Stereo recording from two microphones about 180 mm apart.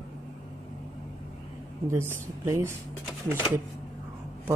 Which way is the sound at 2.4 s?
15° right (ahead or behind).